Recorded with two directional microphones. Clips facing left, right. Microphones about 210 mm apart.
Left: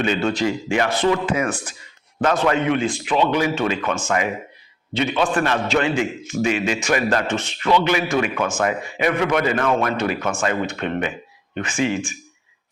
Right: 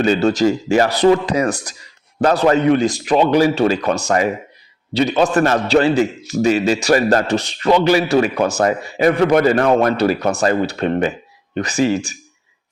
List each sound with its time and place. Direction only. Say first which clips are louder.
0.0 s a man's voice: right 6 dB; 40° right (ahead or behind)